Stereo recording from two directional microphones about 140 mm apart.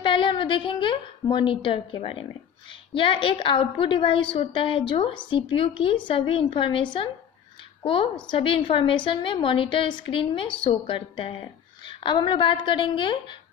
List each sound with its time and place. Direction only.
0.0 s a woman's voice: 35° left (ahead or behind)